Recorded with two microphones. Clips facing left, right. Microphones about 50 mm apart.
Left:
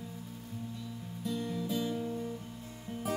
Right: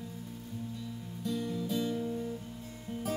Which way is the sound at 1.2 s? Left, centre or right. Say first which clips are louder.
Right 1 dB; centre.